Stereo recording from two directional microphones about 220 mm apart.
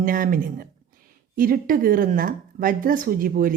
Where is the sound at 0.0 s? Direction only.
40° right (ahead or behind).